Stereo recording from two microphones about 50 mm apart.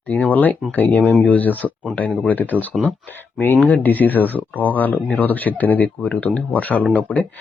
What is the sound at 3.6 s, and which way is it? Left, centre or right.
Speech, left.